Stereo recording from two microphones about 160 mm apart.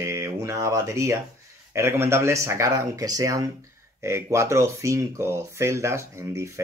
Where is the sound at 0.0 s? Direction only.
20° right (ahead or behind).